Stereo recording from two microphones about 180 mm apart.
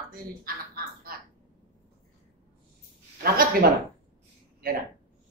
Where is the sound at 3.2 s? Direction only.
55° right (ahead or behind).